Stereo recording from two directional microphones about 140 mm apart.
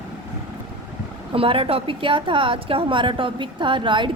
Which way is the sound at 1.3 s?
40° right (ahead or behind).